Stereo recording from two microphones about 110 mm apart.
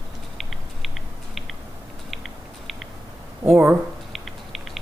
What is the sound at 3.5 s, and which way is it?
Speech, 20° right (ahead or behind).